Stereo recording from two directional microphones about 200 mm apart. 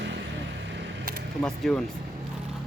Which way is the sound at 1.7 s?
5° left (ahead or behind).